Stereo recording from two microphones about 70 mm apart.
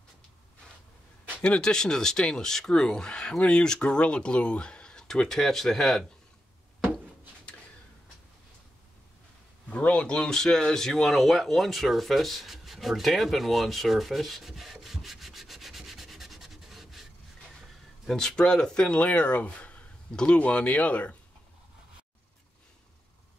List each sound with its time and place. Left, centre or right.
1.4 s speech: centre
9.7 s speech: centre
18.0 s speech: centre